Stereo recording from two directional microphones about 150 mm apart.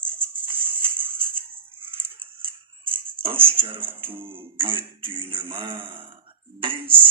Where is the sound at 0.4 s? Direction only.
35° right (ahead or behind).